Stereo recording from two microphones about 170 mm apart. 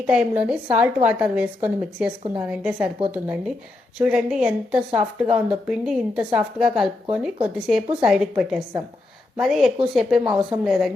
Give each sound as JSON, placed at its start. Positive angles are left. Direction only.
{"t": 0.0, "sound": "a woman's voice", "side_deg": -5}